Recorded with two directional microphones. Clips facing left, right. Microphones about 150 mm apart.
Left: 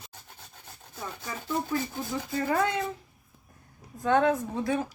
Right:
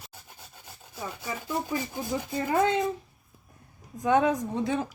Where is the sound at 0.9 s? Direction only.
10° right (ahead or behind).